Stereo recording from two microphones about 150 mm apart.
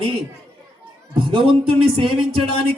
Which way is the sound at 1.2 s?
35° right (ahead or behind).